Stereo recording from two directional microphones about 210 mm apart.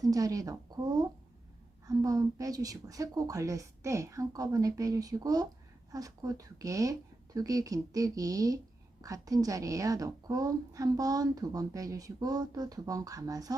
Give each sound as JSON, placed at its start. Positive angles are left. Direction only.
{"t": 0.0, "sound": "a woman's voice", "side_deg": -15}
{"t": 1.9, "sound": "a woman's voice", "side_deg": -15}